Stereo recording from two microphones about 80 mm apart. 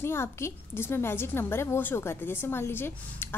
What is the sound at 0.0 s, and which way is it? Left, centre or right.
Speech, left.